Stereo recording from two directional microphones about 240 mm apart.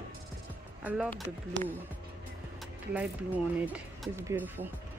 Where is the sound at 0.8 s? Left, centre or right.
Centre.